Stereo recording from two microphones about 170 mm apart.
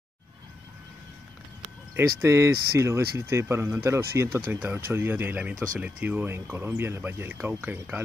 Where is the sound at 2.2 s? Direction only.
15° right (ahead or behind).